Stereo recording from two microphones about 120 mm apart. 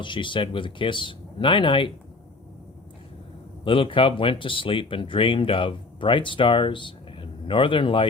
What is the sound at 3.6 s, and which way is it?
Speech, 45° left (ahead or behind).